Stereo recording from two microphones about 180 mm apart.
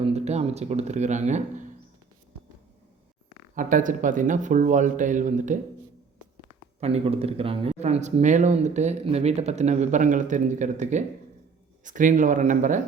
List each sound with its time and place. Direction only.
0.0 s speech: 35° right (ahead or behind)
3.5 s speech: 45° right (ahead or behind)
6.7 s speech: 35° right (ahead or behind)